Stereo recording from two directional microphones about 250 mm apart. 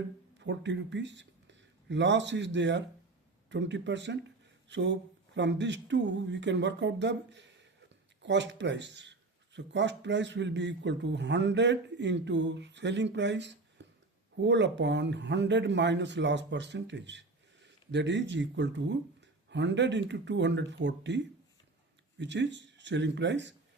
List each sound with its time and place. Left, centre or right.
0.3 s speech: right
13.8 s a sound: right
14.3 s speech: right
22.2 s speech: right